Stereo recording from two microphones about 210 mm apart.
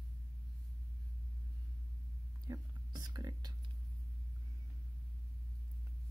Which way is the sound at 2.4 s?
20° right (ahead or behind).